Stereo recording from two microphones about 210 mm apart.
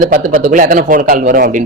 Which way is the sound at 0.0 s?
40° right (ahead or behind).